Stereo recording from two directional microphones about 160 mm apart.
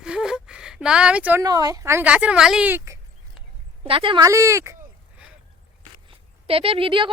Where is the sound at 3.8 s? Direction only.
35° right (ahead or behind).